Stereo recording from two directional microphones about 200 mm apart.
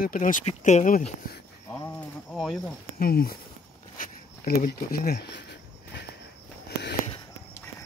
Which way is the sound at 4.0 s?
50° left (ahead or behind).